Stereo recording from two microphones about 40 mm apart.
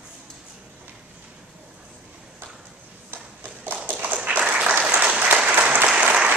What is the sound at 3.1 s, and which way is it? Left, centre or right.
Clip-clop, right.